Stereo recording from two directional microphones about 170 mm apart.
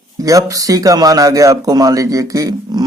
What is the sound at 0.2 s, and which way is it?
Speech, 20° right (ahead or behind).